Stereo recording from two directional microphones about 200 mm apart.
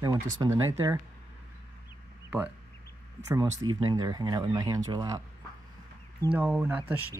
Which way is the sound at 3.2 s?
15° right (ahead or behind).